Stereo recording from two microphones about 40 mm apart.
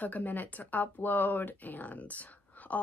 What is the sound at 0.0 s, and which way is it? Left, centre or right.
A woman's voice, left.